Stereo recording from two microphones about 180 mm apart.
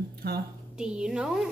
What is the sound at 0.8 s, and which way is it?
Speech, 5° right (ahead or behind).